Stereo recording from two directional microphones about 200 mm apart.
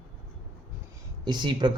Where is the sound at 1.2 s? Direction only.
20° right (ahead or behind).